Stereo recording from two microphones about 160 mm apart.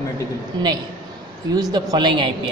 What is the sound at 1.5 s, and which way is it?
Speech, 25° right (ahead or behind).